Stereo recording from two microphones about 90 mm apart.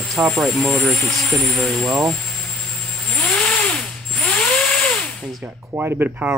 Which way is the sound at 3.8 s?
10° left (ahead or behind).